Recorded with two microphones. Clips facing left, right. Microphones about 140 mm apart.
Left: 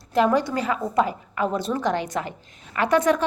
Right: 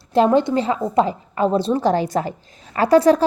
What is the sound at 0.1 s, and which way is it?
A woman's voice, 30° right (ahead or behind).